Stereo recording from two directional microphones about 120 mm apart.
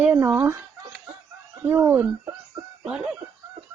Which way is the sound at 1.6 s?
20° right (ahead or behind).